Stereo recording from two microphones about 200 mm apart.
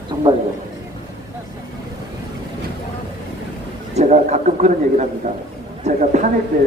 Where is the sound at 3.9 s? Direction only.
35° right (ahead or behind).